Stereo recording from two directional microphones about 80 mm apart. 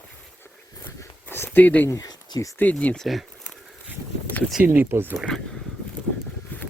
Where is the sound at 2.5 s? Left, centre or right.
Centre.